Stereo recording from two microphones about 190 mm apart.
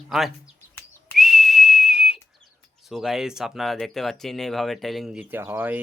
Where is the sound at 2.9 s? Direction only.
Centre (ahead or behind).